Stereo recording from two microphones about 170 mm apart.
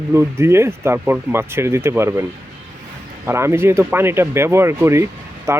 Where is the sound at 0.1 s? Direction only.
15° right (ahead or behind).